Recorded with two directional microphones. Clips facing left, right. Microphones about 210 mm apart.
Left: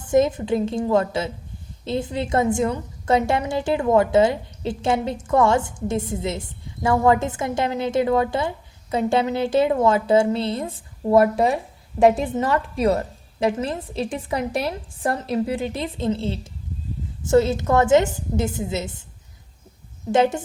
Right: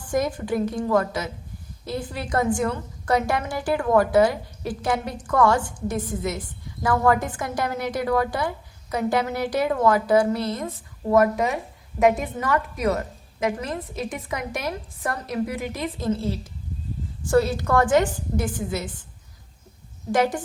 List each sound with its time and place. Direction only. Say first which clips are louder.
0.0 s a woman's voice: left 6 dB; 25° left (ahead or behind)
20.1 s a woman's voice: left 3 dB; 25° left (ahead or behind)